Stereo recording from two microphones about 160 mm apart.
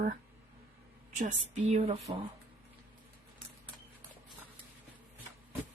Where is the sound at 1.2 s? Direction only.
45° right (ahead or behind).